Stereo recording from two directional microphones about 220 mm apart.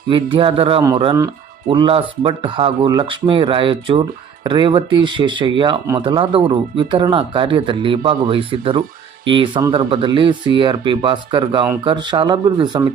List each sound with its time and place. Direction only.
0.1 s speech: 25° right (ahead or behind)